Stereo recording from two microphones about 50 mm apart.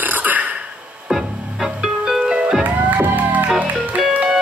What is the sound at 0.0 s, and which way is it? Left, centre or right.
Burping, right.